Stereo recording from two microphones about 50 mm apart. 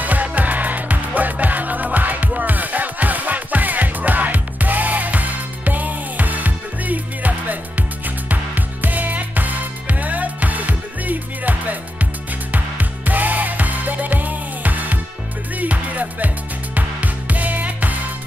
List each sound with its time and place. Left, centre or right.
0.0 s music: right
12.5 s music: right